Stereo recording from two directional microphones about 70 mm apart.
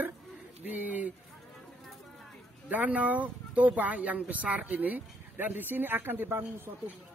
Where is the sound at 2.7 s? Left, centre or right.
Right.